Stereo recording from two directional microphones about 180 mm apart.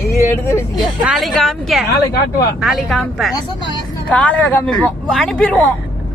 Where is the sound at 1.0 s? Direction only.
Centre (ahead or behind).